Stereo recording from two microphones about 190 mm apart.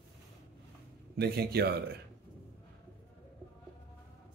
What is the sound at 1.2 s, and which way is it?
Speech, 55° right (ahead or behind).